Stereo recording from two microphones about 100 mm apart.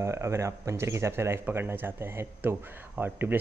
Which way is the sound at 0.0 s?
30° right (ahead or behind).